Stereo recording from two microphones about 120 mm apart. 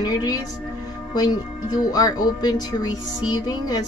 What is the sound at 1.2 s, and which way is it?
Speech, 35° left (ahead or behind).